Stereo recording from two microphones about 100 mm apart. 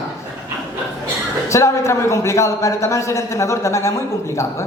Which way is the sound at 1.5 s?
30° left (ahead or behind).